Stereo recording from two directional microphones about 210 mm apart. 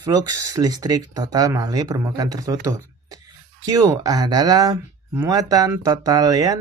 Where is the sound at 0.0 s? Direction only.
15° right (ahead or behind).